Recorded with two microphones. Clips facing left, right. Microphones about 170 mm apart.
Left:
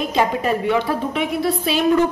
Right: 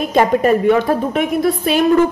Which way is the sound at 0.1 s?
50° right (ahead or behind).